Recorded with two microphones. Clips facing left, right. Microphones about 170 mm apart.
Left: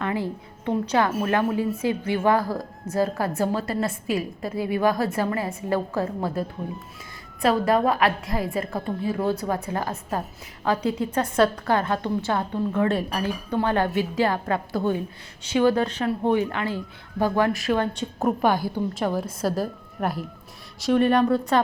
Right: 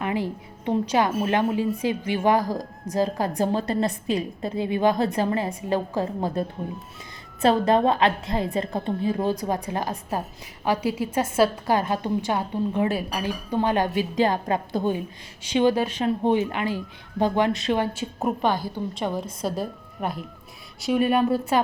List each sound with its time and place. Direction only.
0.0 s a woman's voice: 15° right (ahead or behind)
7.4 s a woman's voice: 25° right (ahead or behind)
12.9 s a woman's voice: 5° right (ahead or behind)
13.2 s a woman's voice: 15° right (ahead or behind)
17.9 s a woman's voice: centre (ahead or behind)
18.4 s a woman's voice: 10° left (ahead or behind); by 21.6 s 10° right (ahead or behind)